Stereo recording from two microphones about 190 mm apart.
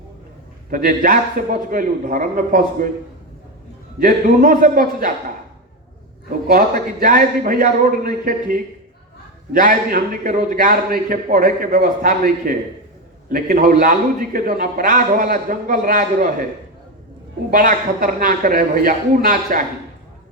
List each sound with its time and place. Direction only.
0.7 s a man's voice: 45° right (ahead or behind)
4.0 s a man's voice: 45° right (ahead or behind)
6.5 s a man's voice: 45° right (ahead or behind)
17.5 s a man's voice: 45° right (ahead or behind)